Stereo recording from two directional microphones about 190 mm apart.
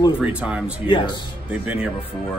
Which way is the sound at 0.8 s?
25° left (ahead or behind).